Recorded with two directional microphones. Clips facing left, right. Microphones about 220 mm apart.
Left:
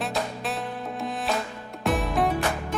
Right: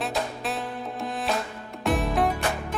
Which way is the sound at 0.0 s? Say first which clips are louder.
Even; centre (ahead or behind).